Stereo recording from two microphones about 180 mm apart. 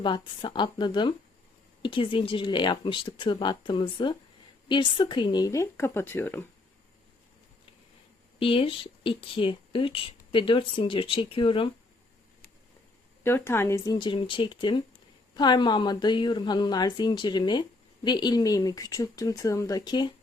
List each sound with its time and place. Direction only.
0.0 s a woman's voice: 25° left (ahead or behind)
8.4 s a woman's voice: 30° left (ahead or behind)
13.2 s a woman's voice: 15° left (ahead or behind)